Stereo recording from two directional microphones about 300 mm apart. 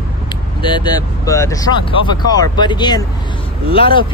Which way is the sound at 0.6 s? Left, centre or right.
Centre.